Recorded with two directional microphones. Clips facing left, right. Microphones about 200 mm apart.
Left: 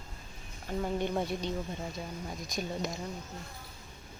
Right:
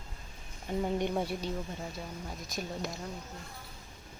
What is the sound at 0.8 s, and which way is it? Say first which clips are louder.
Speech: right 1 dB; 15° right (ahead or behind).